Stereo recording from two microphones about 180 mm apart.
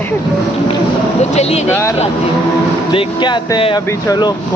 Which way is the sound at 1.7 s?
15° left (ahead or behind).